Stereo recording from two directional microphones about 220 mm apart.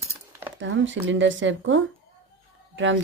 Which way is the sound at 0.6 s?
55° right (ahead or behind).